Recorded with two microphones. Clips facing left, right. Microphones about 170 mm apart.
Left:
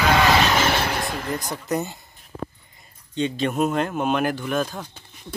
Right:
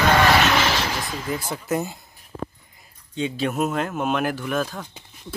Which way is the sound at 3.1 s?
5° right (ahead or behind).